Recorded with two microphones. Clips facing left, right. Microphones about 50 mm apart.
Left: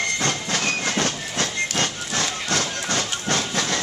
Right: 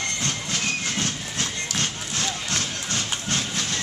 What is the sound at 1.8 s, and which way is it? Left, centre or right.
Music, left.